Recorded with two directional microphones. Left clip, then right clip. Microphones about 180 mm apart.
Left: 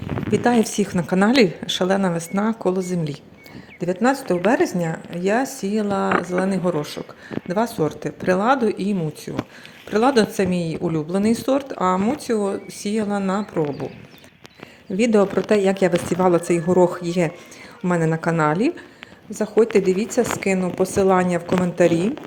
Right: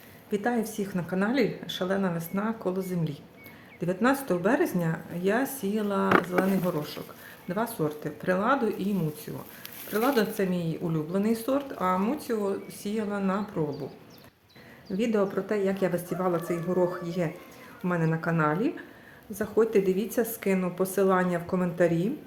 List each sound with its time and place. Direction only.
0.3 s a woman's voice: 45° left (ahead or behind)
3.8 s a woman's voice: 25° left (ahead or behind)
6.1 s speech: 15° left (ahead or behind)
6.4 s a woman's voice: 40° left (ahead or behind)
14.9 s a woman's voice: 45° left (ahead or behind)